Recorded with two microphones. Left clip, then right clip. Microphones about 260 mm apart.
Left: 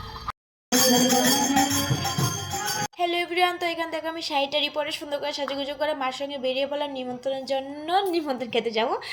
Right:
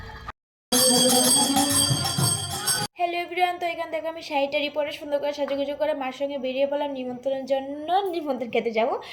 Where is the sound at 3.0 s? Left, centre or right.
Left.